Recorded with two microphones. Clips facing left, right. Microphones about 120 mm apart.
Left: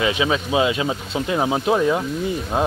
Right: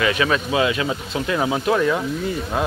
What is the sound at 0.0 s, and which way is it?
Speech, 15° left (ahead or behind).